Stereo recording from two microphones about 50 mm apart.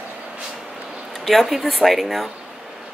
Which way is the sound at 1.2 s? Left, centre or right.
Centre.